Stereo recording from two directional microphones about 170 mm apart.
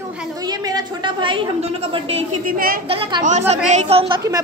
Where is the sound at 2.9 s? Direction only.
30° right (ahead or behind).